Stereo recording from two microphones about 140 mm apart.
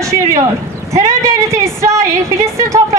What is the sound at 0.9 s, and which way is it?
A woman's voice, 20° right (ahead or behind).